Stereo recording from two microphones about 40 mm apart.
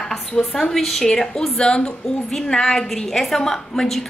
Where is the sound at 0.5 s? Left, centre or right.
Centre.